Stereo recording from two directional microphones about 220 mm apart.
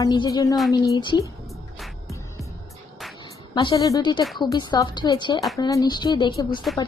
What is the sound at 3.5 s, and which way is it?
Speech, 20° left (ahead or behind).